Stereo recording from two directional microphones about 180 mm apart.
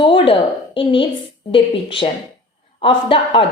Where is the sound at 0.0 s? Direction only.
30° left (ahead or behind).